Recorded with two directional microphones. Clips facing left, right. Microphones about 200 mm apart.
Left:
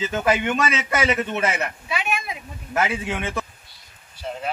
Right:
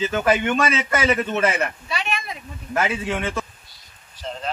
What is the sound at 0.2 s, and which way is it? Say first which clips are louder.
Speech: right 1 dB; 15° left (ahead or behind).